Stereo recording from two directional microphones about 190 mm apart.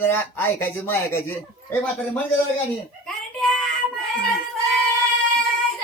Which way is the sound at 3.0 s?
Centre (ahead or behind).